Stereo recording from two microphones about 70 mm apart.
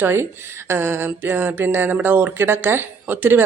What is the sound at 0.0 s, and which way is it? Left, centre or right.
Speech, right.